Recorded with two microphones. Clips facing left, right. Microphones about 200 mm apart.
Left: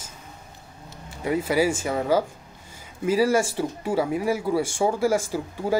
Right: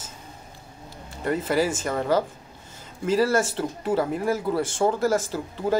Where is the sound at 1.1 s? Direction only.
10° left (ahead or behind).